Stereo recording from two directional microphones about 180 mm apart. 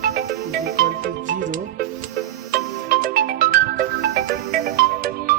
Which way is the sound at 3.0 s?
55° right (ahead or behind).